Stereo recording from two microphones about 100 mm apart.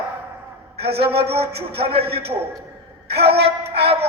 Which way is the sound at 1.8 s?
75° right (ahead or behind).